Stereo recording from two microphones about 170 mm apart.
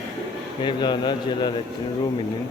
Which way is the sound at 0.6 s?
25° left (ahead or behind).